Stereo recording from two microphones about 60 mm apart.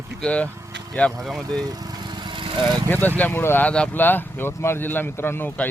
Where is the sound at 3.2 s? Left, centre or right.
Left.